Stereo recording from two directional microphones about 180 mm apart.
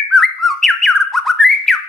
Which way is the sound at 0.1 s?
Centre (ahead or behind).